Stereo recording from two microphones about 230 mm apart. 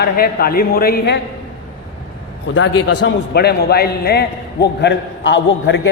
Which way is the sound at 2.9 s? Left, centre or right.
Left.